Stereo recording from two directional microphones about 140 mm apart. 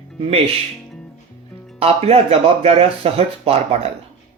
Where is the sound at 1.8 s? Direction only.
45° right (ahead or behind).